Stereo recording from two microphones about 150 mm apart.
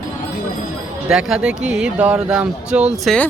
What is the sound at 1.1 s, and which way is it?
Speech, 5° right (ahead or behind).